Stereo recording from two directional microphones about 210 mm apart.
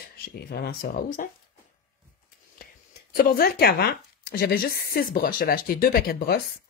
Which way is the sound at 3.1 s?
45° left (ahead or behind).